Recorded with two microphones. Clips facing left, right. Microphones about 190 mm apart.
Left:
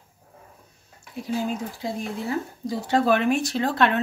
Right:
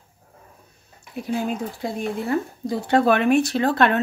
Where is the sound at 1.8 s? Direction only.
60° right (ahead or behind).